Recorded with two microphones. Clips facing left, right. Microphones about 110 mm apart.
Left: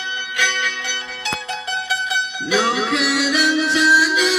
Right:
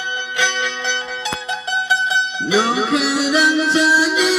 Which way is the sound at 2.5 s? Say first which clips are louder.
Right 2 dB; 25° right (ahead or behind).